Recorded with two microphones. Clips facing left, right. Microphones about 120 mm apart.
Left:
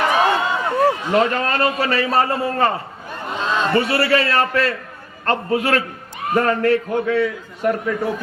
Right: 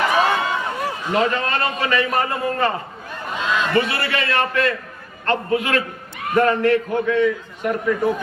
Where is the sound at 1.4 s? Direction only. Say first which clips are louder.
Left 3 dB; 40° left (ahead or behind).